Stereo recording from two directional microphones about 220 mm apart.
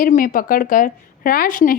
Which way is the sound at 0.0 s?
35° left (ahead or behind).